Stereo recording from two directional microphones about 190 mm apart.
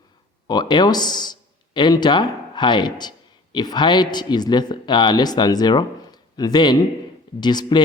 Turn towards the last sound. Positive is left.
turn(degrees=20)  # may be behind; listen again after turning